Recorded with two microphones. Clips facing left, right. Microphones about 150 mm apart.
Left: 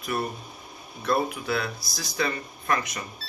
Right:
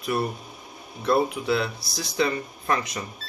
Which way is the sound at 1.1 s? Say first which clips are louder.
Right 4 dB; 25° right (ahead or behind).